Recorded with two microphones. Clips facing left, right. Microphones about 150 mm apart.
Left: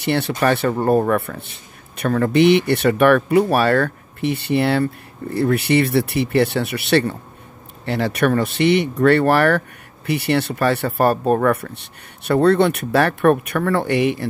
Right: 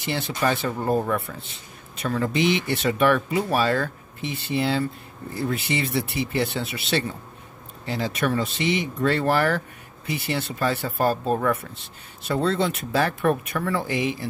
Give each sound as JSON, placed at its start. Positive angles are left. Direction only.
{"t": 0.0, "sound": "speech", "side_deg": 65}